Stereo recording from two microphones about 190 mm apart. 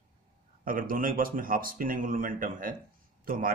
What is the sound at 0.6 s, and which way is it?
Speech, 45° right (ahead or behind).